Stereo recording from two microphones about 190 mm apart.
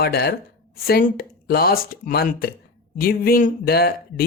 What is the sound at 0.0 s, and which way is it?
Speech, 55° left (ahead or behind).